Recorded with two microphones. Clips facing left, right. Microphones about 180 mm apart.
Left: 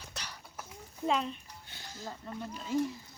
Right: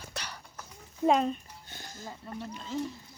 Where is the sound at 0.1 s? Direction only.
65° right (ahead or behind).